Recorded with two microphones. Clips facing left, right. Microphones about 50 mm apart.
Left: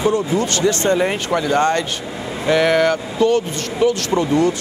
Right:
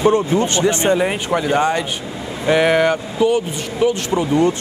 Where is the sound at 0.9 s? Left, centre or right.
Centre.